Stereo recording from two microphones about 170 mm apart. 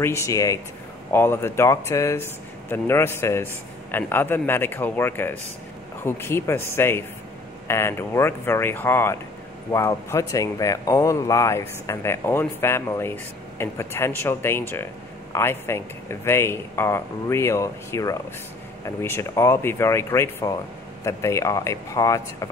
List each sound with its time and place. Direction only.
0.0 s speech: 15° left (ahead or behind)